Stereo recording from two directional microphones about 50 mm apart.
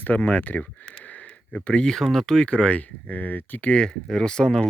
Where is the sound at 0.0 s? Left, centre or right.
Left.